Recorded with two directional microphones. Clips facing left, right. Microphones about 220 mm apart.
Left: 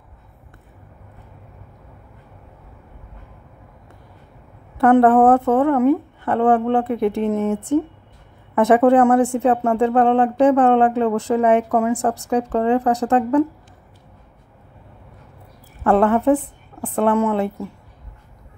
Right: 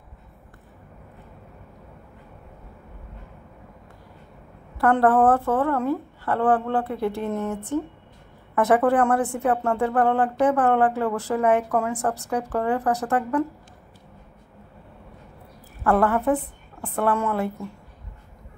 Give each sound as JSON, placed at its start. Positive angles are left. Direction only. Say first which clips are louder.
{"t": 4.7, "sound": "speech", "louder": "left 6 dB", "side_deg": 25}
{"t": 15.8, "sound": "speech", "louder": "left 5 dB", "side_deg": 25}